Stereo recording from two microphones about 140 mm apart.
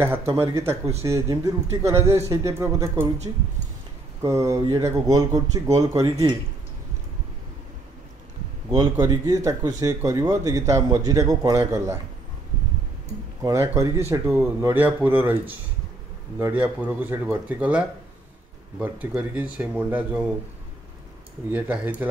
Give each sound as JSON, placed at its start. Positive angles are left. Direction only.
{"t": 0.3, "sound": "speech", "side_deg": -20}
{"t": 4.2, "sound": "speech", "side_deg": -20}
{"t": 8.6, "sound": "speech", "side_deg": -30}
{"t": 13.4, "sound": "speech", "side_deg": -20}
{"t": 21.5, "sound": "speech", "side_deg": -10}